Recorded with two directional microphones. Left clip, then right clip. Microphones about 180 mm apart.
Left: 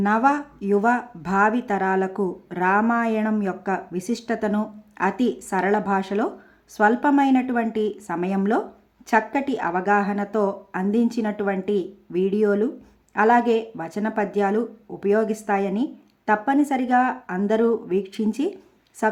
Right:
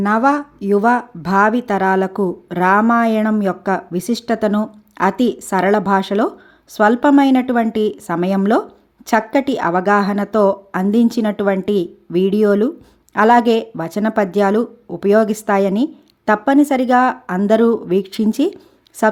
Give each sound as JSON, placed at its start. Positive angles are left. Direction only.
{"t": 0.0, "sound": "speech", "side_deg": -30}